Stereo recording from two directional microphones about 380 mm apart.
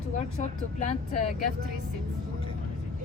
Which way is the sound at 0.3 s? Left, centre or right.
Centre.